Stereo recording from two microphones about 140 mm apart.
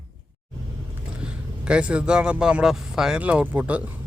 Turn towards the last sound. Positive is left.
turn(degrees=-10)  # may be behind; listen again after turning